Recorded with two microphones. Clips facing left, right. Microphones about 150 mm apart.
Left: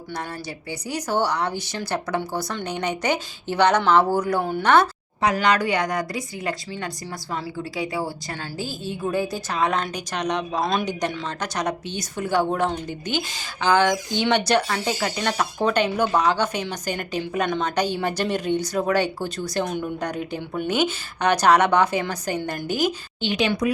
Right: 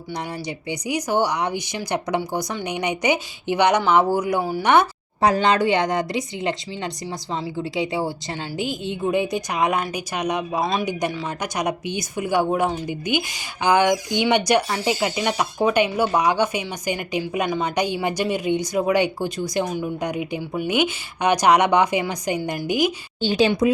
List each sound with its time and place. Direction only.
0.7 s a woman's voice: 15° right (ahead or behind)
5.2 s a woman's voice: 30° right (ahead or behind); by 23.0 s 15° right (ahead or behind)
23.2 s a woman's voice: 30° right (ahead or behind)